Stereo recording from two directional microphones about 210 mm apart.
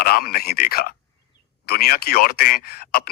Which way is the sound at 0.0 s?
45° left (ahead or behind).